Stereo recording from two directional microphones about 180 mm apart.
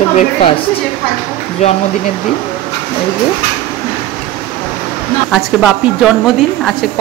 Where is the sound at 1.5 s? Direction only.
40° left (ahead or behind).